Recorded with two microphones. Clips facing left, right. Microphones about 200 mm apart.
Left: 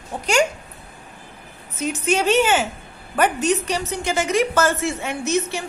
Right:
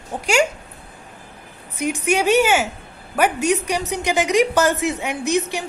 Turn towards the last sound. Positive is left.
turn(degrees=-15)  # may be behind; listen again after turning